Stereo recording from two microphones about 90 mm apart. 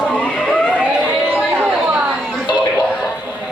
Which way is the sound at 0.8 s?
10° right (ahead or behind).